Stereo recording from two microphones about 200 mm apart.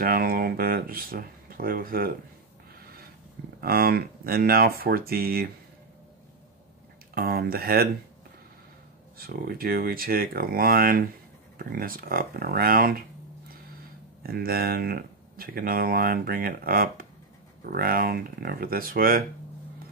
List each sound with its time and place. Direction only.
0.0 s speech: 45° right (ahead or behind)
3.6 s speech: 50° right (ahead or behind)
7.2 s speech: 50° right (ahead or behind)
9.2 s speech: 50° right (ahead or behind)
14.2 s speech: 50° right (ahead or behind)